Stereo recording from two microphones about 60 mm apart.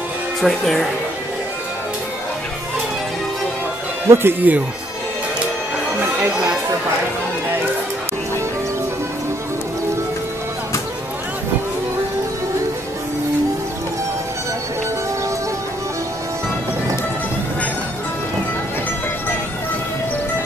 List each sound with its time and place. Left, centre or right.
0.4 s speech: centre
4.1 s speech: right
5.9 s chatter: right
6.3 s speech: centre